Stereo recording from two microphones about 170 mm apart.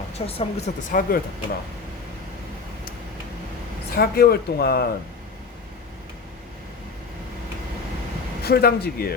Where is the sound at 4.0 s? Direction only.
65° left (ahead or behind).